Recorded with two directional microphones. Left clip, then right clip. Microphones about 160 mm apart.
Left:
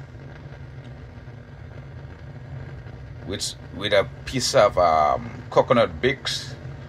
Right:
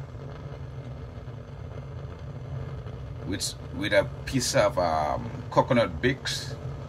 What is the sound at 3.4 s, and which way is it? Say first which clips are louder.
Speech: left 4 dB; 30° left (ahead or behind).